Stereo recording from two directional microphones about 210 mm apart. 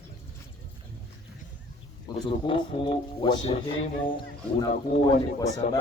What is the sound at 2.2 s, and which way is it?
A man's voice, 20° left (ahead or behind).